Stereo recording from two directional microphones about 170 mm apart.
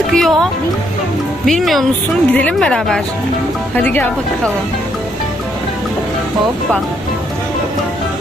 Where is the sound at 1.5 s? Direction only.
Centre (ahead or behind).